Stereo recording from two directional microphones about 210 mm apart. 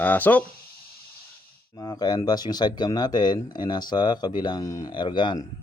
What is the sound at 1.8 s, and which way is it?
Speech, 20° left (ahead or behind).